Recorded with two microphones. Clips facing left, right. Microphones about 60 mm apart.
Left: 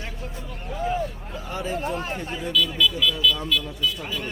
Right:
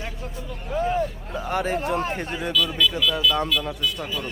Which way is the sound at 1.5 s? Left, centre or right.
Right.